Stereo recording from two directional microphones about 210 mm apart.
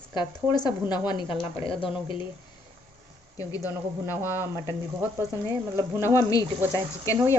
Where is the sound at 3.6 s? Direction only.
10° right (ahead or behind).